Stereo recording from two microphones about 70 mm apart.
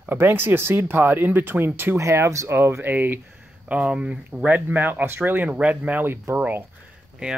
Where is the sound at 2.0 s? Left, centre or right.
Right.